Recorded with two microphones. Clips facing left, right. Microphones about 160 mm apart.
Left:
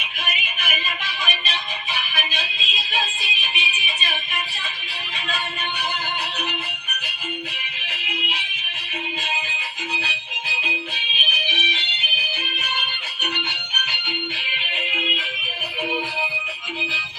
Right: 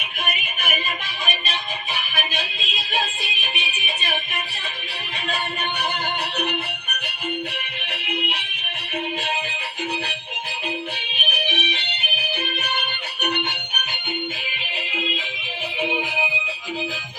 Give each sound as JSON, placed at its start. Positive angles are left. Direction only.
{"t": 0.0, "sound": "music", "side_deg": -55}
{"t": 6.5, "sound": "music", "side_deg": -60}
{"t": 14.8, "sound": "music", "side_deg": -35}
{"t": 15.8, "sound": "music", "side_deg": -15}